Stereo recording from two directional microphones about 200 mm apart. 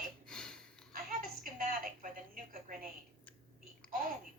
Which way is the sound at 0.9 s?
45° right (ahead or behind).